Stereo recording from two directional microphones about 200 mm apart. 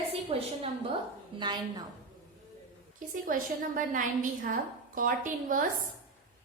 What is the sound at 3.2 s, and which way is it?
A woman's voice, 40° right (ahead or behind).